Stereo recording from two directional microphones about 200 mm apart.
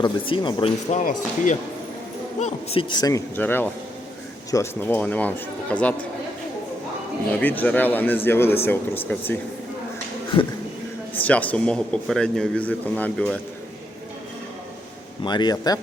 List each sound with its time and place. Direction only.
0.0 s speech: 25° left (ahead or behind); by 6.1 s 5° left (ahead or behind)
7.3 s speech: 10° left (ahead or behind)
10.3 s a man's voice: 25° left (ahead or behind)
11.1 s a man's voice: 10° left (ahead or behind)
15.2 s a man's voice: 20° left (ahead or behind)